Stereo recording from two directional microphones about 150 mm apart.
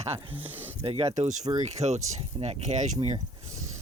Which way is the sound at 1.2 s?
55° right (ahead or behind).